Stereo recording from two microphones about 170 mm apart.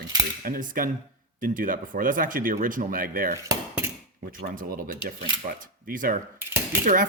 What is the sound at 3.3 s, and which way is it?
Cutlery, 20° right (ahead or behind).